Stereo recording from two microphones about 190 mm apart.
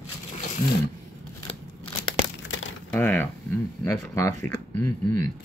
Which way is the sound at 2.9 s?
10° left (ahead or behind).